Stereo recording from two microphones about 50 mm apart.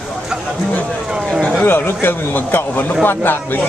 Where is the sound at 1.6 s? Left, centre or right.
Left.